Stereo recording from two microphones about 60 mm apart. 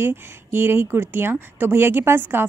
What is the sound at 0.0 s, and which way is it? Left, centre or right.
Speech, right.